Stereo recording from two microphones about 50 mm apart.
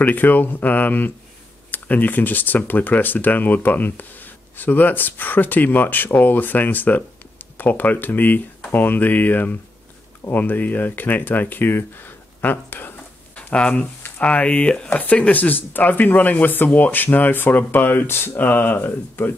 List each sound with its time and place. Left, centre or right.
0.0 s speech: left
13.4 s speech: left
18.4 s speech: left